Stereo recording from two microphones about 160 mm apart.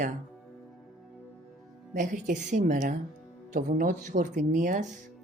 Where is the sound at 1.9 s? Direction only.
55° right (ahead or behind).